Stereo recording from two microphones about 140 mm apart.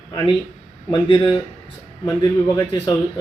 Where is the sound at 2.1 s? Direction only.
20° left (ahead or behind).